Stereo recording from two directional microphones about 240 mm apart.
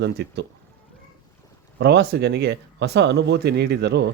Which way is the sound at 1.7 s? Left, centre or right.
Right.